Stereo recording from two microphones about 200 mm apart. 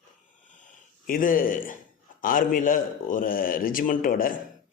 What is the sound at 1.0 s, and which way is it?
A man's voice, 45° left (ahead or behind).